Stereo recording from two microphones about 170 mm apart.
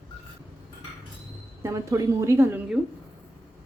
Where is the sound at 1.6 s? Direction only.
20° right (ahead or behind).